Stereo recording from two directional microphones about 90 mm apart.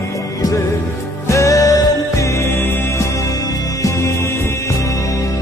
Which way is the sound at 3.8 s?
30° left (ahead or behind).